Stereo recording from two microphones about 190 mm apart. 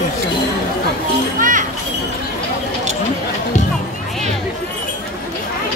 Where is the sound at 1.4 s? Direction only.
40° right (ahead or behind).